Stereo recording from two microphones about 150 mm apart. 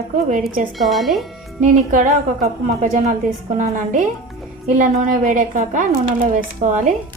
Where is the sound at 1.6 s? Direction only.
60° right (ahead or behind).